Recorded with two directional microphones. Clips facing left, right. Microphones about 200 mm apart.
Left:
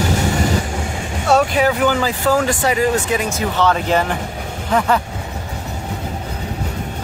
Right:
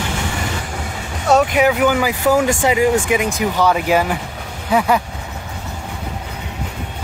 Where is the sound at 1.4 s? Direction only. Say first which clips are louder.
Right 2 dB; 15° right (ahead or behind).